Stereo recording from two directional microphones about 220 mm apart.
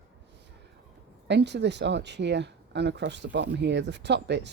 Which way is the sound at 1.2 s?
50° right (ahead or behind).